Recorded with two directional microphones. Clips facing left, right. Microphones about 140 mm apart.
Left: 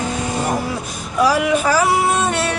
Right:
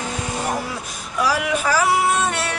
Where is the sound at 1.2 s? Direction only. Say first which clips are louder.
Left 5 dB; 25° left (ahead or behind).